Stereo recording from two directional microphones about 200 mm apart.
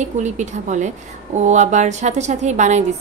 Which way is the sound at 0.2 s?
35° right (ahead or behind).